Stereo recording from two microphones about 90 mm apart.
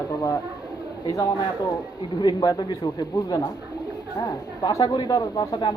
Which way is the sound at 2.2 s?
50° left (ahead or behind).